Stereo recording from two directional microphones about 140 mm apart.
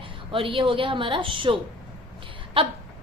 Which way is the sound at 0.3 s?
40° right (ahead or behind).